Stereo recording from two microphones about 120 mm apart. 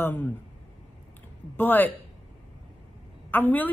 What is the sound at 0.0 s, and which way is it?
Speech, 15° left (ahead or behind).